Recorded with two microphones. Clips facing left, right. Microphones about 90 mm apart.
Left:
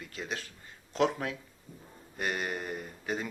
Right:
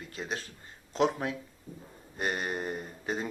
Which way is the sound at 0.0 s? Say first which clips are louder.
Right 1 dB; 30° right (ahead or behind).